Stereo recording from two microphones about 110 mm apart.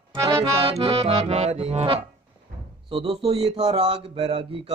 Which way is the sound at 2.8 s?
55° right (ahead or behind).